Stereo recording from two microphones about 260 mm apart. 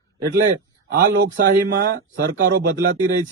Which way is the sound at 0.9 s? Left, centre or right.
Right.